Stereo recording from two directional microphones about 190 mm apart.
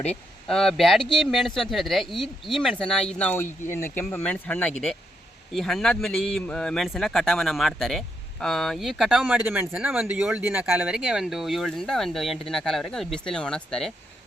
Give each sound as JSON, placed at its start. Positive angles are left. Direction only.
{"t": 0.0, "sound": "a man's voice", "side_deg": 5}